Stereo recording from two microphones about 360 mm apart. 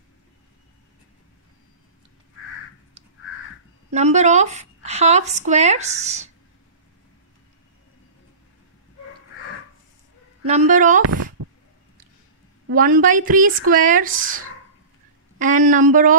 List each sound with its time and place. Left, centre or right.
3.9 s speech: centre
10.4 s a woman's voice: centre
11.0 s speech: right
12.6 s a woman's voice: right
15.3 s a woman's voice: right